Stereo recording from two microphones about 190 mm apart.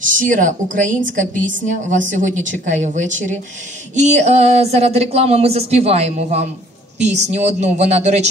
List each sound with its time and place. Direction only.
0.0 s a woman's voice: 45° right (ahead or behind)